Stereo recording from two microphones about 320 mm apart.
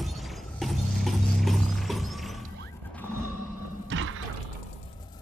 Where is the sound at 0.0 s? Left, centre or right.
Centre.